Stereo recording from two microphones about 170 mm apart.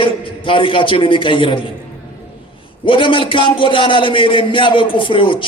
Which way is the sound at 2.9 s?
30° left (ahead or behind).